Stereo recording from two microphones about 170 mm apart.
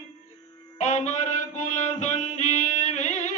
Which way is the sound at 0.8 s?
45° left (ahead or behind).